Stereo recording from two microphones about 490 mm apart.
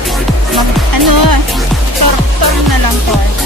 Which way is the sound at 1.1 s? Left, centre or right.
Right.